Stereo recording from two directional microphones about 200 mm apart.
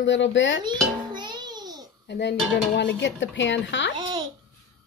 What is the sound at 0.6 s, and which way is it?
Music, 20° right (ahead or behind).